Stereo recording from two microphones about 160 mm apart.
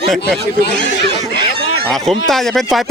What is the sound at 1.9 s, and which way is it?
Speech, centre (ahead or behind).